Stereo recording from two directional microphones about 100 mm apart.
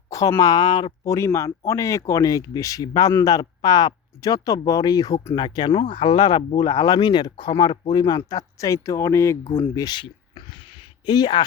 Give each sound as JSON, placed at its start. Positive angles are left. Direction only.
{"t": 0.1, "sound": "speech", "side_deg": 35}
{"t": 1.0, "sound": "speech", "side_deg": 30}
{"t": 9.7, "sound": "speech", "side_deg": 45}